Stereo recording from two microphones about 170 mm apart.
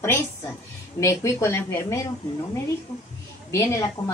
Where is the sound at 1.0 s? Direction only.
15° left (ahead or behind).